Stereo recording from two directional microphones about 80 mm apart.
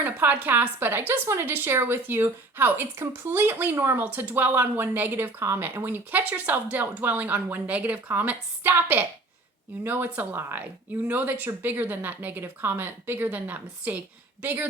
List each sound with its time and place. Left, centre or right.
0.0 s speech: right